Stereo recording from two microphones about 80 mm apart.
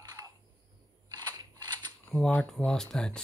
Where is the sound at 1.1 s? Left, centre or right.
Right.